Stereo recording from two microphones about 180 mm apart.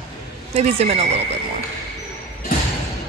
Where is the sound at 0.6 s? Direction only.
35° right (ahead or behind).